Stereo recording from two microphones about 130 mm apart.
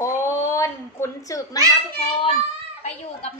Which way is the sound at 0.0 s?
20° left (ahead or behind).